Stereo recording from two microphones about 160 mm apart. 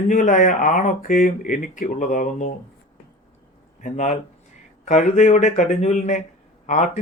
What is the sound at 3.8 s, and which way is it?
Speech, 50° left (ahead or behind).